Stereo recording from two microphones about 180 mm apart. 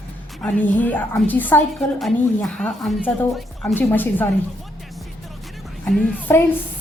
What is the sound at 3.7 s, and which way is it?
Speech, 10° left (ahead or behind).